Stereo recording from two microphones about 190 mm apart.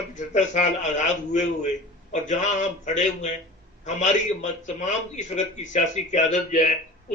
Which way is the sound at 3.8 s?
40° left (ahead or behind).